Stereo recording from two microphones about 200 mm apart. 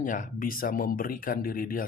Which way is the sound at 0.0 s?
40° left (ahead or behind).